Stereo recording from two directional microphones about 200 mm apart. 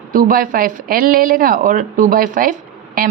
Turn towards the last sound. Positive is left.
turn(degrees=-45)  # may be behind; listen again after turning